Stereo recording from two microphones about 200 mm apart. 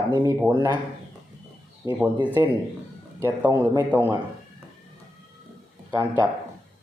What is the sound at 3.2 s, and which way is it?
Speech, 15° right (ahead or behind).